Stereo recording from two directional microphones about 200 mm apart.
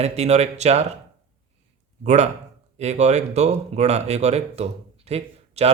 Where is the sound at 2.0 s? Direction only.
35° right (ahead or behind).